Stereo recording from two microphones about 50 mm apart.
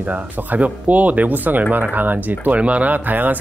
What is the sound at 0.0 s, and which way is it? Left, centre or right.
Speech, right.